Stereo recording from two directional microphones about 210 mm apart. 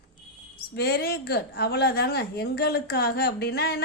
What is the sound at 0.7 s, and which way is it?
A woman's voice, 50° left (ahead or behind).